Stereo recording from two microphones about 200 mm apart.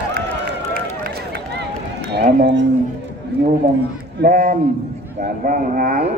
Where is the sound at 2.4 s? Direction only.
60° right (ahead or behind).